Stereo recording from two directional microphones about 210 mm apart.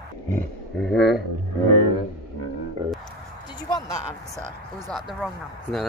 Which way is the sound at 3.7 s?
20° left (ahead or behind).